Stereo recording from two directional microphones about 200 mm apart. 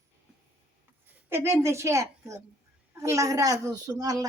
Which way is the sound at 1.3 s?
15° right (ahead or behind).